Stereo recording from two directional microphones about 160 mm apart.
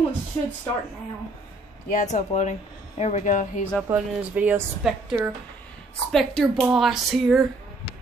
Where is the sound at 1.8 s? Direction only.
50° left (ahead or behind).